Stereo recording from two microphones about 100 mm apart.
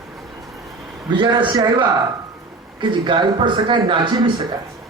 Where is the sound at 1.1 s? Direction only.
55° right (ahead or behind).